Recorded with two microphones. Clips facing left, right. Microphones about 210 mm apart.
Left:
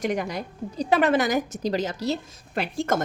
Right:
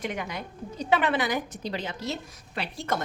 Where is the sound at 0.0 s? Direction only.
40° left (ahead or behind).